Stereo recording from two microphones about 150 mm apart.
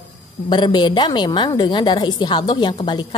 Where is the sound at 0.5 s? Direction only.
30° left (ahead or behind).